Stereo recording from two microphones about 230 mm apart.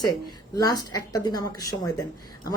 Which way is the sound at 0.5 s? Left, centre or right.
Centre.